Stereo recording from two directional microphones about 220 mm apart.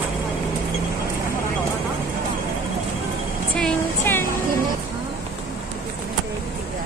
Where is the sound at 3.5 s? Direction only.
5° left (ahead or behind).